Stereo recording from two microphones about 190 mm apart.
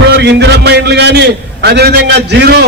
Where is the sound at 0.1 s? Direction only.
60° right (ahead or behind).